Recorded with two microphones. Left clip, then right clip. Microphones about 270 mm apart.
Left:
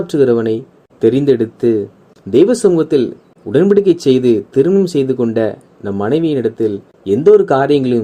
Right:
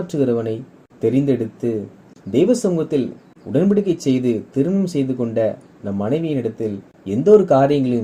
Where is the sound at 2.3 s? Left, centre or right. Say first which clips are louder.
Left 7 dB; left.